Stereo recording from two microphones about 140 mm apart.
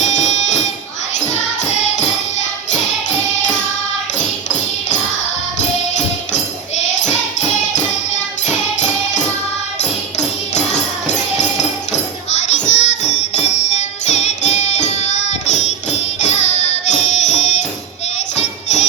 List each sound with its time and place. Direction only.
0.0 s music: 55° left (ahead or behind)
10.2 s music: 55° left (ahead or behind)
12.5 s music: 55° left (ahead or behind)